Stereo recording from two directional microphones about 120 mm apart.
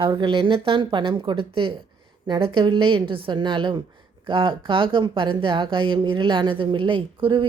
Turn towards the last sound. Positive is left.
turn(degrees=-45)  # may be behind; listen again after turning